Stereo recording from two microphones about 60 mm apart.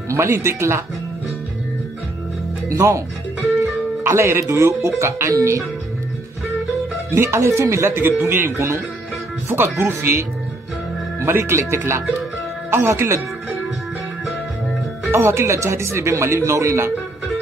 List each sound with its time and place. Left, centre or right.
0.1 s speech: right
2.7 s speech: right
4.0 s speech: right
7.2 s speech: right
8.0 s speech: right
15.0 s speech: right